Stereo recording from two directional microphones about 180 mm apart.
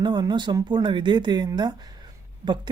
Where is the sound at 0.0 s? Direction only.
25° right (ahead or behind).